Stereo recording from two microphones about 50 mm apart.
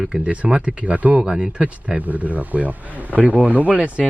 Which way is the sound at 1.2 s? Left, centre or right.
Centre.